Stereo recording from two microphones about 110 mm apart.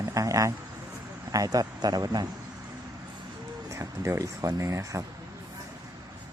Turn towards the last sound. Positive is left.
turn(degrees=-30)  # may be behind; listen again after turning